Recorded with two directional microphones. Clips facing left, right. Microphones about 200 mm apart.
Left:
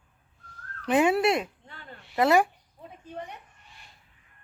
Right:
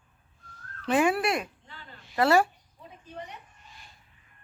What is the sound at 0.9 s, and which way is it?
Speech, 20° left (ahead or behind).